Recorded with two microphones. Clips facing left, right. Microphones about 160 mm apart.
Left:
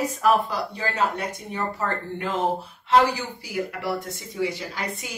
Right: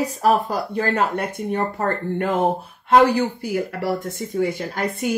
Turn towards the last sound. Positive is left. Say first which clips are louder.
# right 8 dB
turn(degrees=-50)  # may be behind; listen again after turning